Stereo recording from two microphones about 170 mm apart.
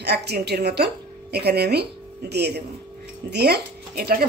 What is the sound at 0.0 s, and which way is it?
A woman's voice, 75° right (ahead or behind).